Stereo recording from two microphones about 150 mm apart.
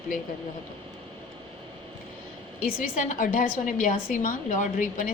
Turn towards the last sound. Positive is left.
turn(degrees=60)  # may be behind; listen again after turning